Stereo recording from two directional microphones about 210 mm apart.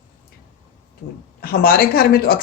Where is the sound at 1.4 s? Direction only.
45° left (ahead or behind).